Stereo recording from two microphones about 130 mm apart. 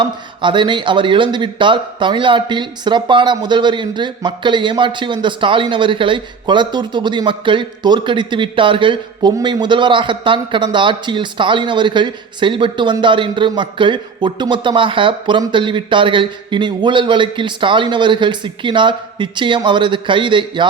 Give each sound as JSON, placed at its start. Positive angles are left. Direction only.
{"t": 0.0, "sound": "speech", "side_deg": -40}